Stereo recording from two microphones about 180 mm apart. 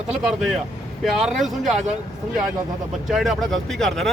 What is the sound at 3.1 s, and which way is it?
Speech, centre (ahead or behind).